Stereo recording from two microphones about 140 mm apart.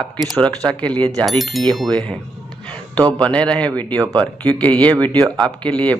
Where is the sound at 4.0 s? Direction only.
25° right (ahead or behind).